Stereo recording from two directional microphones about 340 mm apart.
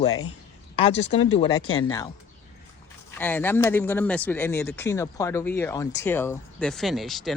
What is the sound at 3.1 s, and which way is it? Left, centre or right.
Speech, centre.